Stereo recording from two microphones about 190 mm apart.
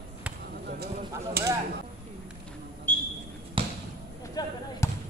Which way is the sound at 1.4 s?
55° right (ahead or behind).